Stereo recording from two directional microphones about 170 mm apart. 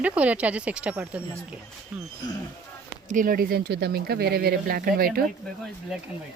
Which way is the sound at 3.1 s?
55° right (ahead or behind).